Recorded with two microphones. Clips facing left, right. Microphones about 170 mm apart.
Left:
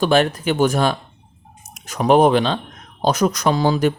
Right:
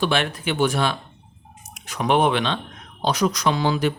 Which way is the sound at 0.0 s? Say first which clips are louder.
Left 6 dB; 40° left (ahead or behind).